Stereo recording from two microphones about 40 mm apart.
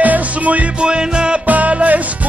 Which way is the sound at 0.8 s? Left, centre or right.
Right.